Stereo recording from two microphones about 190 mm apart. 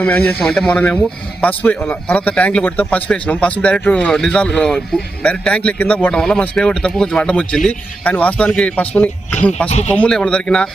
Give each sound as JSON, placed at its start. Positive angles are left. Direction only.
{"t": 0.0, "sound": "a man's voice", "side_deg": 10}
{"t": 9.6, "sound": "speech", "side_deg": 35}
{"t": 9.9, "sound": "speech", "side_deg": 5}